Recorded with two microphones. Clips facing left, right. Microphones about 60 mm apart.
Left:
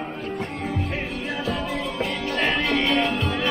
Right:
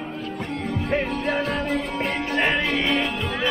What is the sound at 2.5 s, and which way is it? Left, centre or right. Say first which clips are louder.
Music: even; centre.